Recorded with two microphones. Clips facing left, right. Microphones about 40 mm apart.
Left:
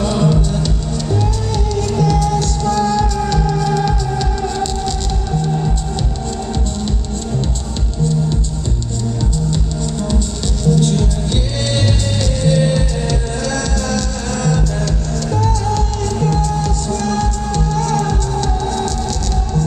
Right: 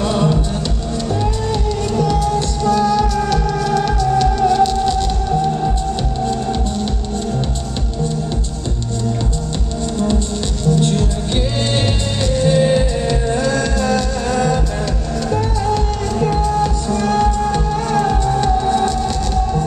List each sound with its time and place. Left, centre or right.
0.0 s music: centre
2.0 s music: centre
12.4 s music: centre